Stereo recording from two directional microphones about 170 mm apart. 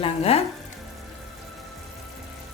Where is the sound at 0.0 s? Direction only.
35° left (ahead or behind).